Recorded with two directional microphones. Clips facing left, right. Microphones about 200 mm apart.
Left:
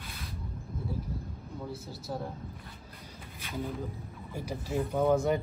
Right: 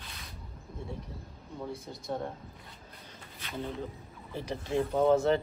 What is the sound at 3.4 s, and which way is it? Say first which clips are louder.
Speech: left 1 dB; 5° left (ahead or behind).